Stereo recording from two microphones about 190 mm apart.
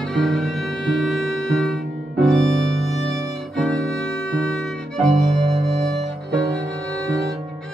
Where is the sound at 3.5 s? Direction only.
Centre (ahead or behind).